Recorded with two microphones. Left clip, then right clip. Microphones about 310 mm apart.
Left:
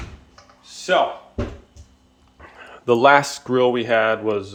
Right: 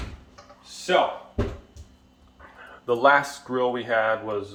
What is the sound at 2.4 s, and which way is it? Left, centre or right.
Speech, left.